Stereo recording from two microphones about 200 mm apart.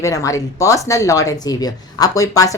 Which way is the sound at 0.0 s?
15° left (ahead or behind).